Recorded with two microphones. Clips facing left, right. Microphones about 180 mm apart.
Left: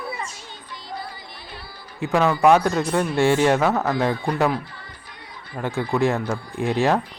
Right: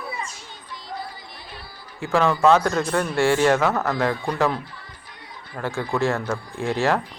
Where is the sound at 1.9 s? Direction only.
20° left (ahead or behind).